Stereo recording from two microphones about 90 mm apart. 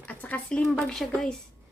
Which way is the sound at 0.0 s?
15° left (ahead or behind).